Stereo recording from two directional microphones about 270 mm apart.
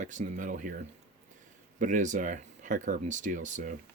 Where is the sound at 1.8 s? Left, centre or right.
Right.